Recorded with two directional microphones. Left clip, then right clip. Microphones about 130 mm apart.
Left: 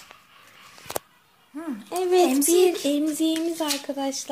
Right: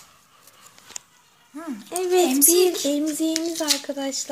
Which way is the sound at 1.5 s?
10° right (ahead or behind).